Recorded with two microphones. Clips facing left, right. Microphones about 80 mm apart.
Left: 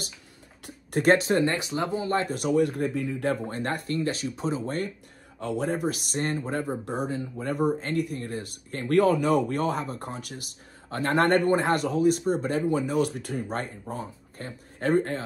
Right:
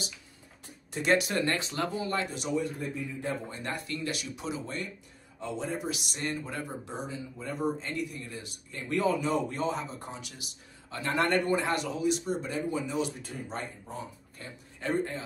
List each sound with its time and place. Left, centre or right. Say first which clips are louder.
1.1 s speech: left 2 dB; left
1.4 s speech: left 4 dB; centre
2.2 s speech: left 8 dB; left
5.4 s speech: left 7 dB; left
6.8 s speech: left 8 dB; left